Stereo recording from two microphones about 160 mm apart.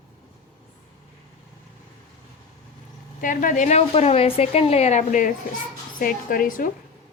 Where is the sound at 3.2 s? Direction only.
55° left (ahead or behind).